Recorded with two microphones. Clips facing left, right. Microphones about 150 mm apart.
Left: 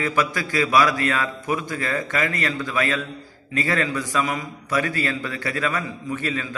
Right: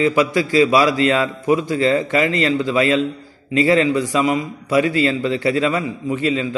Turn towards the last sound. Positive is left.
turn(degrees=-20)  # may be behind; listen again after turning